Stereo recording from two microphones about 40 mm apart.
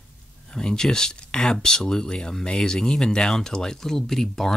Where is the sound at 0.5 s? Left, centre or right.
Centre.